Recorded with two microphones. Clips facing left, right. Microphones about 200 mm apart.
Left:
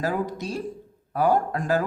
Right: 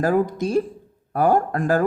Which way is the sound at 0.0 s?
50° right (ahead or behind).